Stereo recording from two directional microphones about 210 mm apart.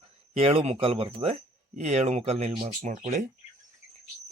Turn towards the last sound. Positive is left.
turn(degrees=-35)  # may be behind; listen again after turning